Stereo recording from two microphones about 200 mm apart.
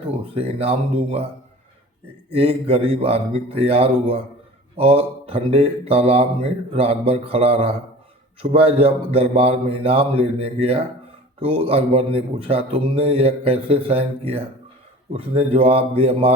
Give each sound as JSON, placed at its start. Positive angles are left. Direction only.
{"t": 0.3, "sound": "a man's voice", "side_deg": -30}
{"t": 2.3, "sound": "a man's voice", "side_deg": -30}